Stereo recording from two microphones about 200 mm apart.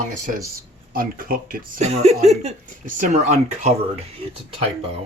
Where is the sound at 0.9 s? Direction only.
45° right (ahead or behind).